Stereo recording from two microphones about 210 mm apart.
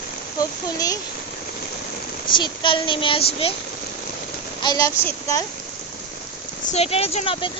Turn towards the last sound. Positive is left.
turn(degrees=30)  # may be behind; listen again after turning